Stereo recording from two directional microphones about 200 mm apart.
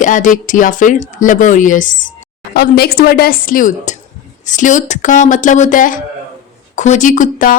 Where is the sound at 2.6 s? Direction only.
50° left (ahead or behind).